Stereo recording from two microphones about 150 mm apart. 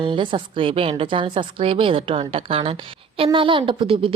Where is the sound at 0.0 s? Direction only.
35° right (ahead or behind).